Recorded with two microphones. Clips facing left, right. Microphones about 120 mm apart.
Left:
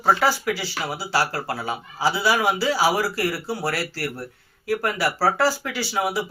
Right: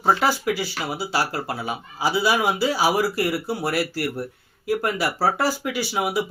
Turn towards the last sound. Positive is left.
turn(degrees=-20)  # may be behind; listen again after turning